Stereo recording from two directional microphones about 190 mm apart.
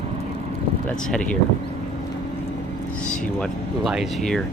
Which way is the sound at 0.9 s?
5° left (ahead or behind).